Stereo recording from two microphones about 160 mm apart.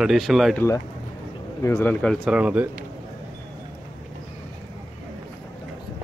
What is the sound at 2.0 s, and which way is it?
Speech, centre (ahead or behind).